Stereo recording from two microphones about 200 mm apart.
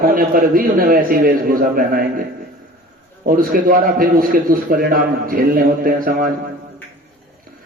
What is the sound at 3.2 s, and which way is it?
A man's voice, 45° right (ahead or behind).